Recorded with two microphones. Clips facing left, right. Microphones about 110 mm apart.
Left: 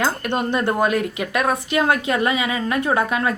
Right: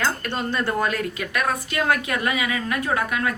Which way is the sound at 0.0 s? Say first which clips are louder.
Left 4 dB; 20° left (ahead or behind).